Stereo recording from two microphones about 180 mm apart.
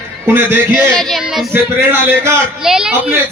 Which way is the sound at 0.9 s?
Centre (ahead or behind).